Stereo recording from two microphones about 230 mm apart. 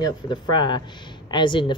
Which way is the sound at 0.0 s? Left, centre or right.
Centre.